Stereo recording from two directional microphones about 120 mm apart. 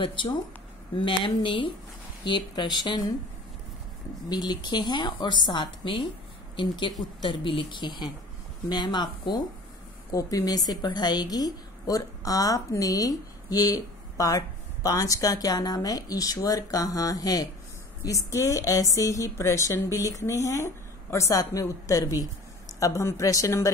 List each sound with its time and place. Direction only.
0.0 s a woman's voice: 45° left (ahead or behind)
4.3 s a woman's voice: 35° left (ahead or behind)